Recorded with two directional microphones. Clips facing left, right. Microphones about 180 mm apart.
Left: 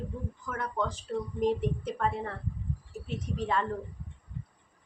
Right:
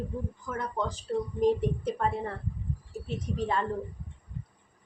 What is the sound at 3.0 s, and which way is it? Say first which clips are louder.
Speech: right 2 dB; 35° right (ahead or behind).